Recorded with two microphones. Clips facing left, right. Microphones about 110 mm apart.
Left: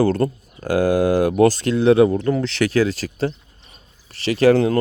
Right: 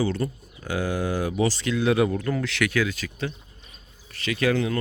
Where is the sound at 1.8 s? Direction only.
30° left (ahead or behind).